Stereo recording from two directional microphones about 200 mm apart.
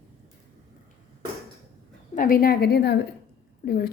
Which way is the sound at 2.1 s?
45° left (ahead or behind).